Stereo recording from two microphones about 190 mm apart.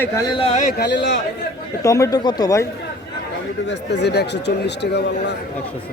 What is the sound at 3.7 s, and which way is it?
Speech, 65° left (ahead or behind).